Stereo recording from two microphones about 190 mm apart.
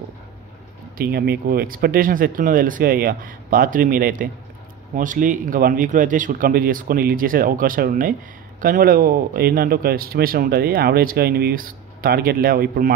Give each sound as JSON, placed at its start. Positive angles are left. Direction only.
{"t": 0.9, "sound": "speech", "side_deg": -55}